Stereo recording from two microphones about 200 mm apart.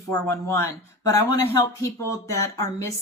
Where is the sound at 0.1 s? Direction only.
15° left (ahead or behind).